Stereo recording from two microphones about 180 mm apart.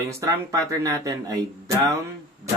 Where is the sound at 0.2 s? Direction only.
20° right (ahead or behind).